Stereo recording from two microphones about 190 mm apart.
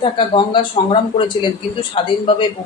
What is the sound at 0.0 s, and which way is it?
Speech, 25° left (ahead or behind).